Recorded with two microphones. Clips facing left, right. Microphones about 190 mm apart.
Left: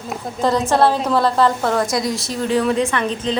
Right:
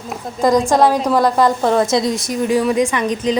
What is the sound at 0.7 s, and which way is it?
A woman's voice, 15° right (ahead or behind).